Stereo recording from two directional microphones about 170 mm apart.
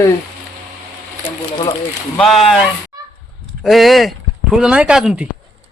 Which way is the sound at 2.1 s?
Centre (ahead or behind).